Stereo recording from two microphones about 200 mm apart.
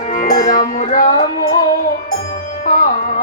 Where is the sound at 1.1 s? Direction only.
20° left (ahead or behind).